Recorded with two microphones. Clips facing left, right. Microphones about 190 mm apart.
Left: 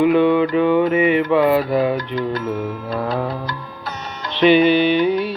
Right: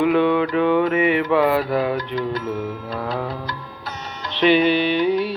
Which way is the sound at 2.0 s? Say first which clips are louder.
Left 2 dB; 55° left (ahead or behind).